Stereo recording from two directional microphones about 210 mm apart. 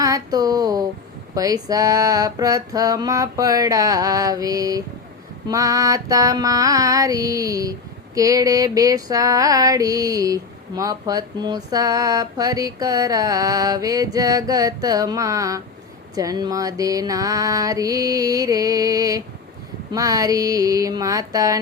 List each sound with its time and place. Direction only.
0.0 s speech: 15° right (ahead or behind)
1.4 s music: 15° right (ahead or behind)